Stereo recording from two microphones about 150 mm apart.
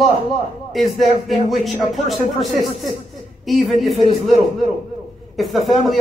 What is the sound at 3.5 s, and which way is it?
Speech, centre (ahead or behind).